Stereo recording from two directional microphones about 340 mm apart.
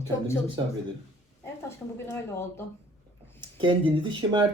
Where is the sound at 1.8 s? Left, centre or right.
Centre.